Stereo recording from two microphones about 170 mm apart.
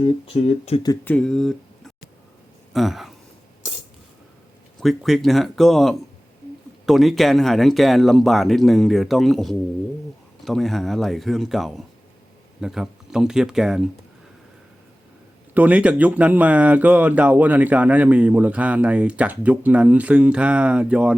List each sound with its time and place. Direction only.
0.0 s speech: 40° left (ahead or behind)
1.0 s speech: 5° left (ahead or behind)
4.8 s speech: centre (ahead or behind)
15.5 s speech: 10° right (ahead or behind)